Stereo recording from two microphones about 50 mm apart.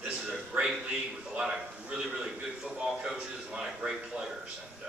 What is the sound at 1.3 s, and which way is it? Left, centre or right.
Speech, centre.